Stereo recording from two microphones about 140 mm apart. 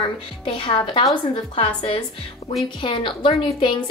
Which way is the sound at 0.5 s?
35° left (ahead or behind).